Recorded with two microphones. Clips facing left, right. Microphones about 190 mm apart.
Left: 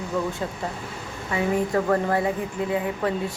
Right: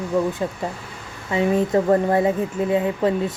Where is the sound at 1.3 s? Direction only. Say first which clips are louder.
Right 4 dB; 20° right (ahead or behind).